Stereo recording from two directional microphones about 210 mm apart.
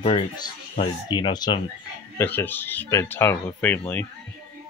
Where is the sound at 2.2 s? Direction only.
10° left (ahead or behind).